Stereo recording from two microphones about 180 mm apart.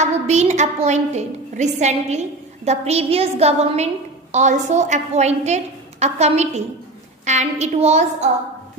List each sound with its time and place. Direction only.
0.0 s a woman's voice: 40° right (ahead or behind)